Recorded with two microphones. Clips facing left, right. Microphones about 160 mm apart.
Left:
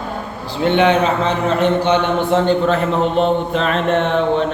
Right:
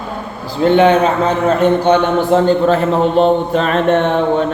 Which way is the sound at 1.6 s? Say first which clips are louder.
Right 3 dB; 50° right (ahead or behind).